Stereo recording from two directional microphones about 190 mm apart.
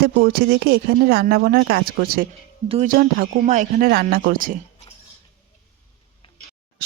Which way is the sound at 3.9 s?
55° right (ahead or behind).